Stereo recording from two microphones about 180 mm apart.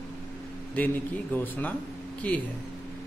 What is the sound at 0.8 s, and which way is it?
A man's voice, 10° left (ahead or behind).